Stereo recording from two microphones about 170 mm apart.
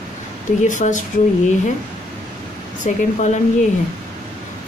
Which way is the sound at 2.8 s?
45° left (ahead or behind).